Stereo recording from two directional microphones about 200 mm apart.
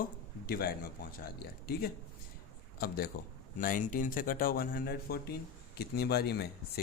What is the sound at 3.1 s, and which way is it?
Speech, 45° left (ahead or behind).